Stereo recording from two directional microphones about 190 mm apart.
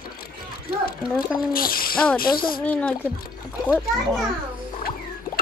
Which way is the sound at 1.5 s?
50° left (ahead or behind).